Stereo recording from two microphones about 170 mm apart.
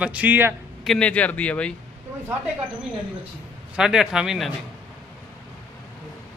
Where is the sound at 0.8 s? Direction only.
5° left (ahead or behind).